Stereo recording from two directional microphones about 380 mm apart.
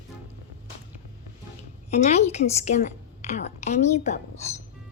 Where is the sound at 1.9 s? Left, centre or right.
Centre.